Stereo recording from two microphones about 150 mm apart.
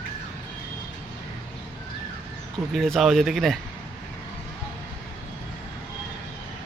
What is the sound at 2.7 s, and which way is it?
Speech, centre (ahead or behind).